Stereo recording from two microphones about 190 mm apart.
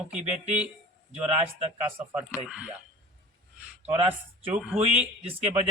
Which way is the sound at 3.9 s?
30° right (ahead or behind).